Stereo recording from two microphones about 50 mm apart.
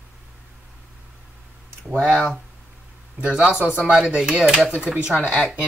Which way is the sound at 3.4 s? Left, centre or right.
Centre.